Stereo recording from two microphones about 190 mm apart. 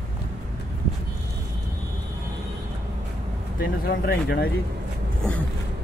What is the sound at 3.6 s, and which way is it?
Speech, 50° left (ahead or behind).